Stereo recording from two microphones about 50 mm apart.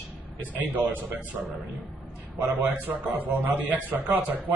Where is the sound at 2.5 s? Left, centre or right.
Right.